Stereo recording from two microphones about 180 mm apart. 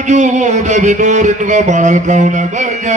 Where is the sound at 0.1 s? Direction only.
40° right (ahead or behind).